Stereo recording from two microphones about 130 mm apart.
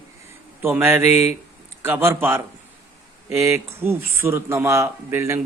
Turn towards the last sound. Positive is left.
turn(degrees=-20)  # may be behind; listen again after turning